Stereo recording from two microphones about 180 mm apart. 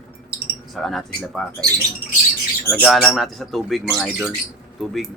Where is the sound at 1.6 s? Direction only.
20° right (ahead or behind).